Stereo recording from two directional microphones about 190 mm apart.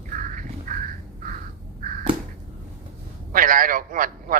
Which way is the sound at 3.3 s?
45° right (ahead or behind).